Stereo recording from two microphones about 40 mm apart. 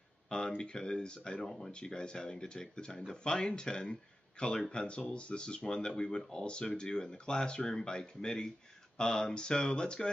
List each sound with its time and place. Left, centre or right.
0.6 s speech: centre
1.4 s speech: centre
1.7 s speech: left